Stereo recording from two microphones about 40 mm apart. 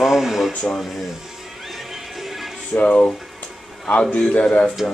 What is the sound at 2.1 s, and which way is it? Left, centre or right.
Music, centre.